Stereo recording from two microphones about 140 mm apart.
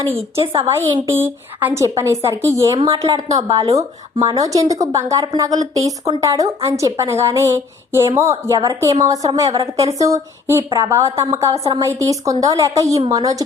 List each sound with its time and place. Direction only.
0.9 s a woman's voice: 15° right (ahead or behind)